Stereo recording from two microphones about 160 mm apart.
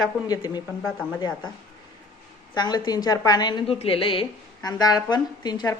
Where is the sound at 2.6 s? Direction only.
25° left (ahead or behind).